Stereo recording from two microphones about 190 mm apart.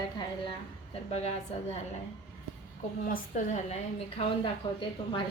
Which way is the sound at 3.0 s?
45° left (ahead or behind).